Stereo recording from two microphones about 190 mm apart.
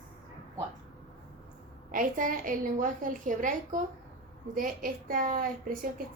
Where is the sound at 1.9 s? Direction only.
45° right (ahead or behind).